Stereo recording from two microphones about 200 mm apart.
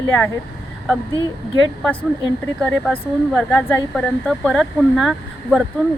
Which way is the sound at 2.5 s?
5° left (ahead or behind).